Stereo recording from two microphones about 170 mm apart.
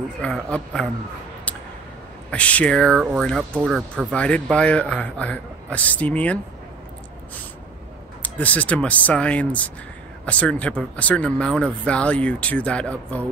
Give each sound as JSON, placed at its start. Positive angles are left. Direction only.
{"t": 0.2, "sound": "speech", "side_deg": 5}
{"t": 2.3, "sound": "speech", "side_deg": 5}
{"t": 4.1, "sound": "speech", "side_deg": 5}
{"t": 8.2, "sound": "speech", "side_deg": 10}